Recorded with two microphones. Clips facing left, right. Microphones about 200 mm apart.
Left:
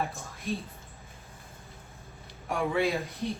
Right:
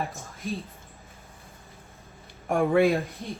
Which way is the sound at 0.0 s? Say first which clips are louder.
Right 1 dB; centre (ahead or behind).